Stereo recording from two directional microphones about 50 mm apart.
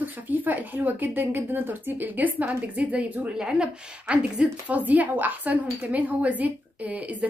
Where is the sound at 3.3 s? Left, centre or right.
Centre.